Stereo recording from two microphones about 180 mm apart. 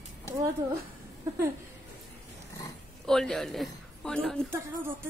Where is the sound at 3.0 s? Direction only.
5° left (ahead or behind).